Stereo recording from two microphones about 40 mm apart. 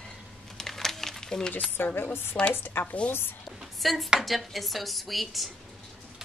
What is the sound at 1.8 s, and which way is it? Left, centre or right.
Speech, left.